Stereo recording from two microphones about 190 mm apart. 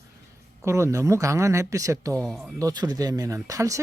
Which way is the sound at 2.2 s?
5° right (ahead or behind).